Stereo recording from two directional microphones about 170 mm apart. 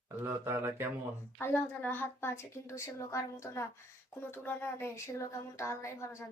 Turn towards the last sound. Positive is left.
turn(degrees=15)  # may be behind; listen again after turning